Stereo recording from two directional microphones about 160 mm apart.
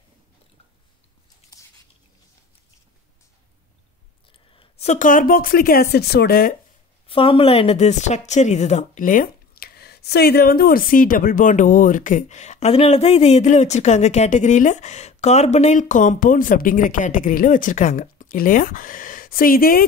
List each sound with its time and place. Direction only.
4.3 s speech: 35° left (ahead or behind); by 6.5 s 75° left (ahead or behind)
7.1 s speech: 35° left (ahead or behind); by 19.8 s 65° left (ahead or behind)